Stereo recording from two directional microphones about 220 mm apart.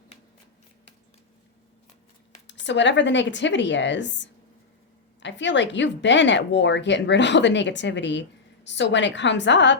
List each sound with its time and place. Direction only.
2.5 s a woman's voice: 55° left (ahead or behind)